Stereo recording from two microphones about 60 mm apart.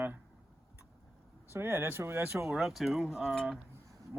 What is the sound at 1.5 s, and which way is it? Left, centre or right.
Speech, right.